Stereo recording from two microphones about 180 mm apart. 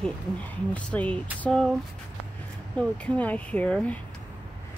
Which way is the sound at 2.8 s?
10° left (ahead or behind).